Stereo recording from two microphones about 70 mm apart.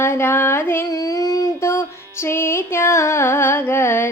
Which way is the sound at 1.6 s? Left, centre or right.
Left.